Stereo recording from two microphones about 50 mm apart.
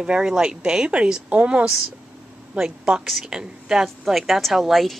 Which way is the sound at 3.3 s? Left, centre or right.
Centre.